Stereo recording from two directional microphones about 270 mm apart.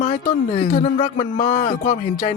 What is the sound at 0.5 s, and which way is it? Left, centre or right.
Speech, left.